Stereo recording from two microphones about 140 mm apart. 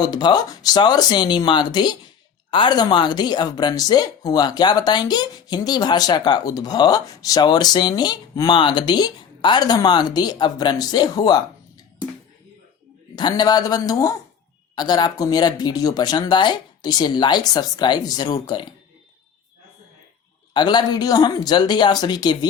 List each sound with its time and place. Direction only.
0.0 s speech: 30° left (ahead or behind)
13.1 s speech: 30° left (ahead or behind)
20.5 s speech: 30° left (ahead or behind)